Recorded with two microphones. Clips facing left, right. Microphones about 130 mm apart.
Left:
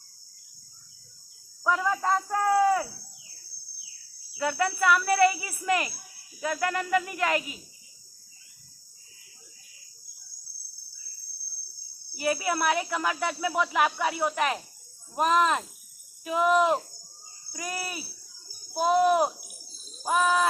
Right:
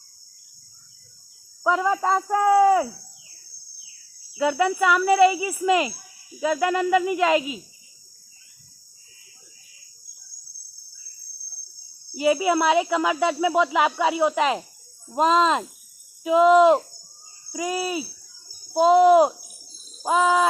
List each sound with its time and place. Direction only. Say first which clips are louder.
1.6 s speech: right 5 dB; 15° right (ahead or behind)
4.4 s speech: right 6 dB; 10° right (ahead or behind)
12.1 s speech: right 8 dB; 15° right (ahead or behind)
20.1 s speech: right 5 dB; 15° right (ahead or behind)